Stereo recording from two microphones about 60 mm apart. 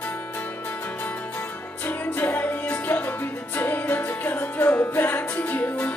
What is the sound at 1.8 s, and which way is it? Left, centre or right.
Music, left.